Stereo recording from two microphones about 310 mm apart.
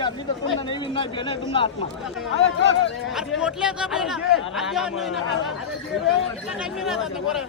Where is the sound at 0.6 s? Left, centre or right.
Centre.